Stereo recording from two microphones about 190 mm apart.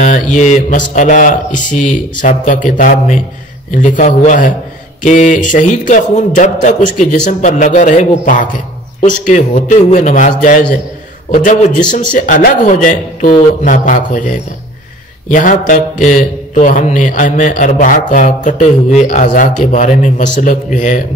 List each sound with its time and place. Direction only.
0.0 s a man's voice: 40° left (ahead or behind)